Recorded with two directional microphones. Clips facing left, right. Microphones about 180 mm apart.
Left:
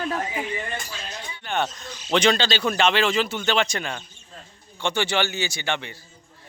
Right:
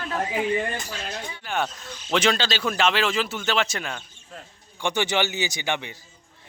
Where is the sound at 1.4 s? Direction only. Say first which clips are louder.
Left 2 dB; 5° right (ahead or behind).